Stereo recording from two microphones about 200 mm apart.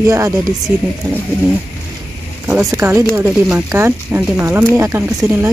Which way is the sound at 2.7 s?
15° right (ahead or behind).